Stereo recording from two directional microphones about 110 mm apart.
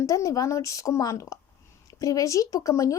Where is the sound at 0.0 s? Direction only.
30° left (ahead or behind).